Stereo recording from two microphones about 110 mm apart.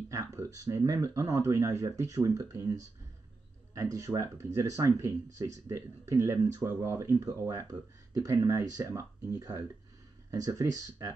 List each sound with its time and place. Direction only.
0.1 s speech: 30° right (ahead or behind)